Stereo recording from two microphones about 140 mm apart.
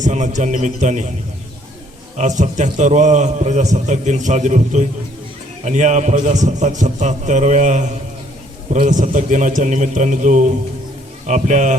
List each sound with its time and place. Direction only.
0.0 s a man's voice: 60° right (ahead or behind)
2.1 s a man's voice: 60° right (ahead or behind)